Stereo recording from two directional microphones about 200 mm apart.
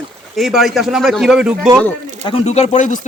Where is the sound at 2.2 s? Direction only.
30° left (ahead or behind).